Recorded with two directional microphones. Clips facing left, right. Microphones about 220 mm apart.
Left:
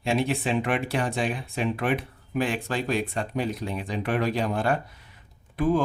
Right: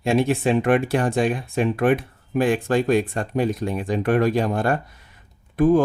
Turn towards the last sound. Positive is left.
turn(degrees=-45)  # may be behind; listen again after turning